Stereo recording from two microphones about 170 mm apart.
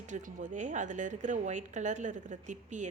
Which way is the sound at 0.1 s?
45° right (ahead or behind).